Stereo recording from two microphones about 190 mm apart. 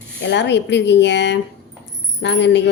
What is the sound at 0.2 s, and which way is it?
A woman's voice, 65° left (ahead or behind).